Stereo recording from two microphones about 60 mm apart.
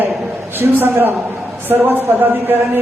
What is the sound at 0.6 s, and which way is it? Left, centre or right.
A man's voice, right.